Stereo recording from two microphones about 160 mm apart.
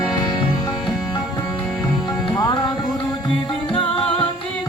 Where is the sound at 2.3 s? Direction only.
25° left (ahead or behind).